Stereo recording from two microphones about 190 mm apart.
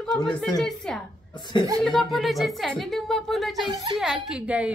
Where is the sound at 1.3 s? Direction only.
25° left (ahead or behind).